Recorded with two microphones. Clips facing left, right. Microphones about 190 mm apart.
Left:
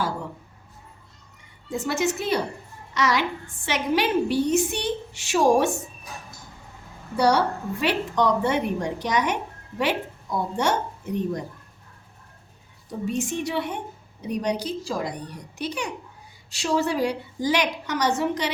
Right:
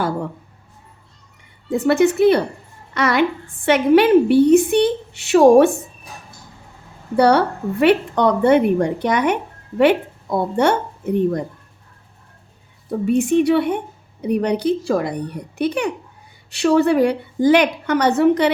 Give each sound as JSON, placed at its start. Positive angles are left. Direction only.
{"t": 1.7, "sound": "a woman's voice", "side_deg": -60}
{"t": 7.2, "sound": "a woman's voice", "side_deg": -60}
{"t": 12.9, "sound": "a woman's voice", "side_deg": -60}